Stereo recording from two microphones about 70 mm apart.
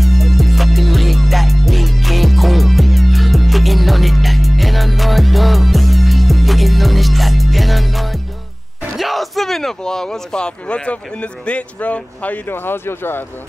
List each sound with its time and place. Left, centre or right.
0.0 s music: centre
8.9 s speech: centre; by 13.2 s left